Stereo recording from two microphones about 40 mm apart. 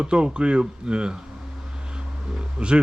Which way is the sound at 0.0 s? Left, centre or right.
Right.